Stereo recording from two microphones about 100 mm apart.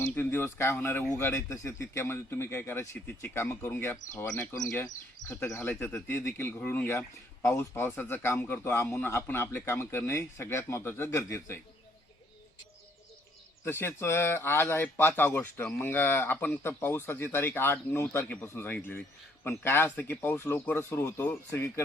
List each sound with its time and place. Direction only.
0.0 s speech: 20° left (ahead or behind)
5.6 s speech: 20° left (ahead or behind)
13.7 s speech: 25° left (ahead or behind)